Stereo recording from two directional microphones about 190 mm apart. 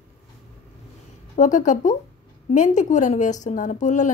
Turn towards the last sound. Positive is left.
turn(degrees=40)  # may be behind; listen again after turning